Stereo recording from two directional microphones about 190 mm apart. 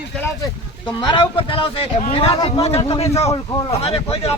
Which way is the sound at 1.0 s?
25° left (ahead or behind).